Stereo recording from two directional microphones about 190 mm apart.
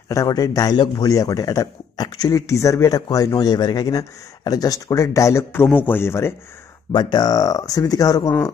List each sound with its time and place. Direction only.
0.1 s a man's voice: 20° left (ahead or behind)